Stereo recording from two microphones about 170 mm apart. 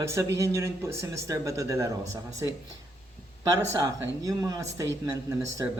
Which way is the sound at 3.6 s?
20° right (ahead or behind).